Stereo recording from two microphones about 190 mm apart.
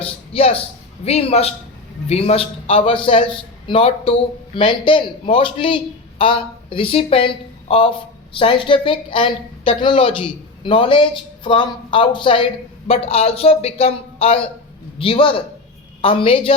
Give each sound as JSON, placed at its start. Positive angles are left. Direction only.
{"t": 0.0, "sound": "a man's voice", "side_deg": 30}